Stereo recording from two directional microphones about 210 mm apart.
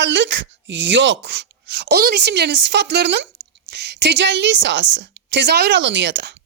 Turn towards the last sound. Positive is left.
turn(degrees=-55)  # may be behind; listen again after turning